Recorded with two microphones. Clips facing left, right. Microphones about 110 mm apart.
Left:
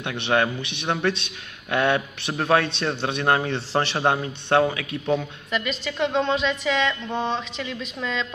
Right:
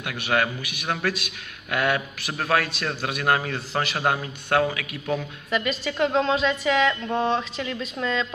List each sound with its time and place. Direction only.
0.0 s a man's voice: 25° left (ahead or behind)
5.5 s speech: centre (ahead or behind)